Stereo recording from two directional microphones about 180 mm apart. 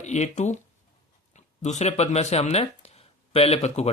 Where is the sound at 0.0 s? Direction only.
40° left (ahead or behind).